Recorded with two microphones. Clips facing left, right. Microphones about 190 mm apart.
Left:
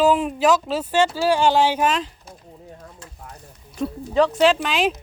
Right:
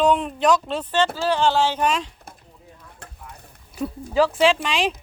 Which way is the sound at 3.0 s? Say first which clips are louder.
Even; 60° right (ahead or behind).